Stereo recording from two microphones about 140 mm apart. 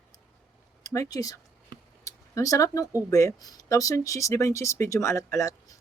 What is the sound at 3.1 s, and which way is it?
Speech, 25° left (ahead or behind).